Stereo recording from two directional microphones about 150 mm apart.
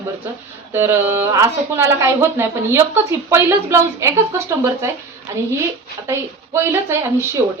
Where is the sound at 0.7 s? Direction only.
15° right (ahead or behind).